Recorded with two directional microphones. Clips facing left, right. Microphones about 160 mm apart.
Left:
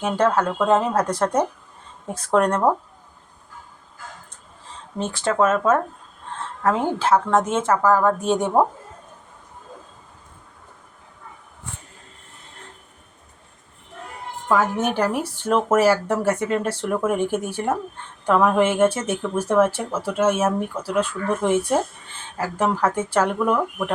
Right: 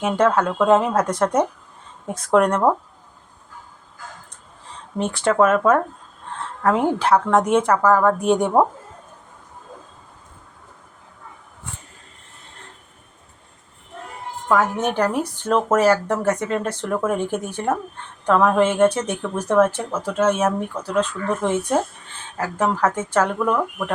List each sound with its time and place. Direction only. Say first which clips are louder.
0.0 s speech: right 2 dB; 30° left (ahead or behind)
5.1 s speech: right 3 dB; 30° left (ahead or behind)
7.0 s speech: left 1 dB; 25° left (ahead or behind)
14.4 s speech: right 1 dB; 5° left (ahead or behind)